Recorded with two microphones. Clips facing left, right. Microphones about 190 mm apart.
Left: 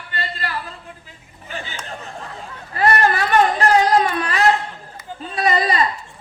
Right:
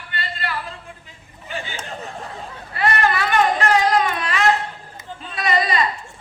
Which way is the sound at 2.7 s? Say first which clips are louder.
Left 3 dB; 40° left (ahead or behind).